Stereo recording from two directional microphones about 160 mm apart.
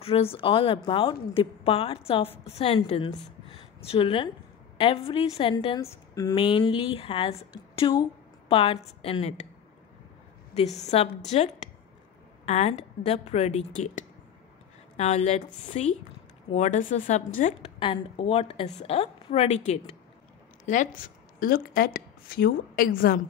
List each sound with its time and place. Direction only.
0.0 s a woman's voice: 35° left (ahead or behind)
3.4 s a sound: 35° left (ahead or behind)
4.7 s a woman's voice: 35° left (ahead or behind)
10.5 s a woman's voice: 45° left (ahead or behind)
17.7 s a woman's voice: 35° left (ahead or behind)
20.6 s speech: 50° left (ahead or behind)